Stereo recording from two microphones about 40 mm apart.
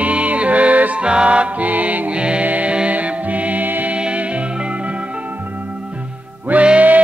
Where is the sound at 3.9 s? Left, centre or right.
Right.